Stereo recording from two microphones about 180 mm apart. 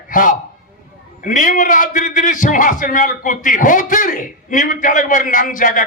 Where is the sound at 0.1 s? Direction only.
50° left (ahead or behind).